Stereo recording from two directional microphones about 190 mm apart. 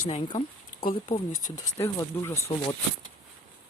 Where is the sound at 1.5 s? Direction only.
15° left (ahead or behind).